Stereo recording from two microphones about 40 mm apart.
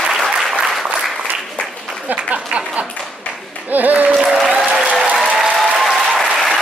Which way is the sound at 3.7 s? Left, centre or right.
Right.